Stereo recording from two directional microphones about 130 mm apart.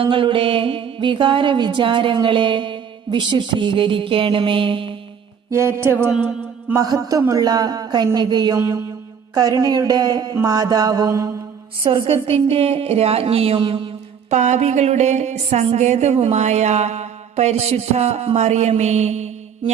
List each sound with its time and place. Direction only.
0.0 s music: 40° right (ahead or behind)
5.5 s mantra: 20° right (ahead or behind)
6.7 s music: 25° right (ahead or behind)
10.4 s mantra: 30° right (ahead or behind)
11.8 s a woman's voice: 40° right (ahead or behind)
14.3 s a sound: 65° right (ahead or behind)